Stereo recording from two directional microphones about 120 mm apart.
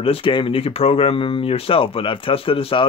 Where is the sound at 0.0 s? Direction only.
50° left (ahead or behind).